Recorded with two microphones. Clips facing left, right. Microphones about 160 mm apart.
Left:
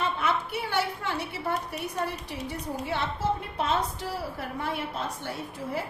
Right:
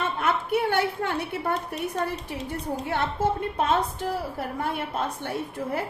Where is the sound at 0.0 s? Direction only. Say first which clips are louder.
Right 2 dB; 55° right (ahead or behind).